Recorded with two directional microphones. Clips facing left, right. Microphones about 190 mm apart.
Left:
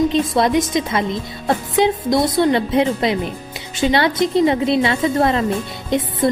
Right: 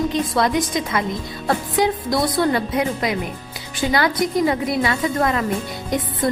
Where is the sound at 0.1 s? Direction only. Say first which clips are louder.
Left 3 dB; 20° left (ahead or behind).